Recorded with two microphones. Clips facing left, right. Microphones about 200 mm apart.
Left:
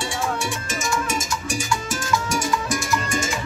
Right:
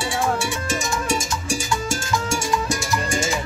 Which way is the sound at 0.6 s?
30° right (ahead or behind).